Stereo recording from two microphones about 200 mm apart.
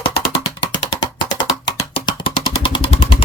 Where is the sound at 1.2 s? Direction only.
20° left (ahead or behind).